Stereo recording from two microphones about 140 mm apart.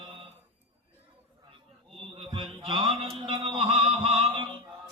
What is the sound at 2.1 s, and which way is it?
Music, 40° right (ahead or behind).